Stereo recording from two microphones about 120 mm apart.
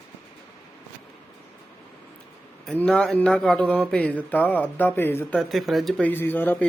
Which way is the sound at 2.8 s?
10° left (ahead or behind).